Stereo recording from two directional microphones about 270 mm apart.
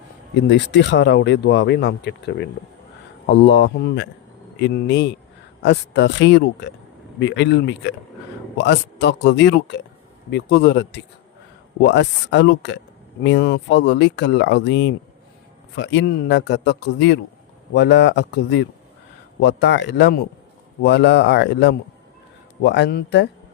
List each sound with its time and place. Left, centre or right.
0.3 s speech: left